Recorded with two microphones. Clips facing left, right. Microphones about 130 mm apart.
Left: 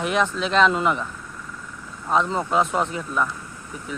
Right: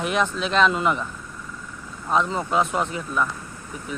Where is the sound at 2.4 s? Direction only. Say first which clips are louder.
Left 1 dB; 20° left (ahead or behind).